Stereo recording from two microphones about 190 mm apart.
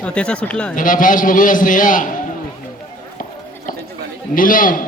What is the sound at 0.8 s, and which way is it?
A man's voice, 45° left (ahead or behind).